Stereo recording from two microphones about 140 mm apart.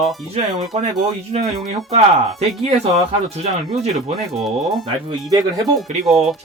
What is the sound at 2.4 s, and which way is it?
Speech, 50° right (ahead or behind).